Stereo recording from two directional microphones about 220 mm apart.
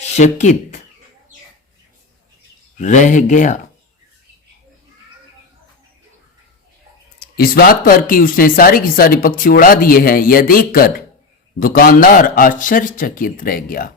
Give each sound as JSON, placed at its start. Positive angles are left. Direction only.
{"t": 0.0, "sound": "speech", "side_deg": 30}
{"t": 2.7, "sound": "speech", "side_deg": 35}
{"t": 7.2, "sound": "speech", "side_deg": 45}